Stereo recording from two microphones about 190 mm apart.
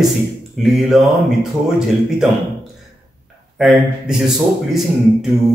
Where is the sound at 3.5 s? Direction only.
Centre (ahead or behind).